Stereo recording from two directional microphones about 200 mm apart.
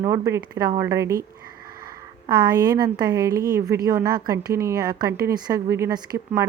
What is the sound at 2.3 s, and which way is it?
Speech, 20° right (ahead or behind).